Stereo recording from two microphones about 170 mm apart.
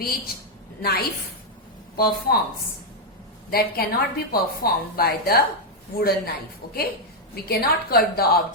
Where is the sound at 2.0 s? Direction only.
60° left (ahead or behind).